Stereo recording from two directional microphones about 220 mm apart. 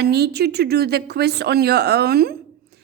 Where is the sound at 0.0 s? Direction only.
45° right (ahead or behind).